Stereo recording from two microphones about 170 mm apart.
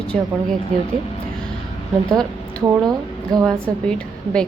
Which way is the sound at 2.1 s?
5° left (ahead or behind).